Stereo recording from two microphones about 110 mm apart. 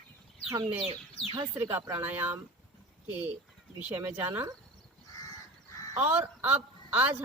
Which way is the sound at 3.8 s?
15° right (ahead or behind).